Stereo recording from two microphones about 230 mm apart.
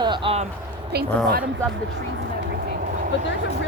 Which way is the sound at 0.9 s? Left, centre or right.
Right.